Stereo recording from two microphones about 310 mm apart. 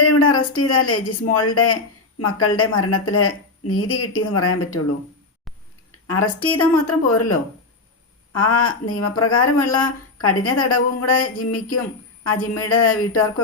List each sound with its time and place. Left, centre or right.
0.0 s speech: left
6.1 s speech: left